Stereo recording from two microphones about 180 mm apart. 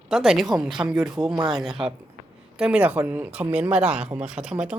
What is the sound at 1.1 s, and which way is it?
Speech, 25° right (ahead or behind).